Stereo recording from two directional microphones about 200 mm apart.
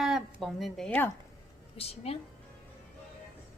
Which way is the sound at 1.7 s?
30° left (ahead or behind).